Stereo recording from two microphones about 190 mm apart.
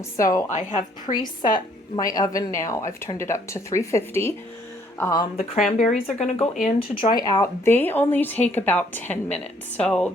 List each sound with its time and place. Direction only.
0.2 s speech: 15° left (ahead or behind)
0.5 s a woman's voice: 40° left (ahead or behind)
1.1 s speech: 25° left (ahead or behind)
5.6 s a woman's voice: 40° left (ahead or behind); by 10.1 s 5° left (ahead or behind)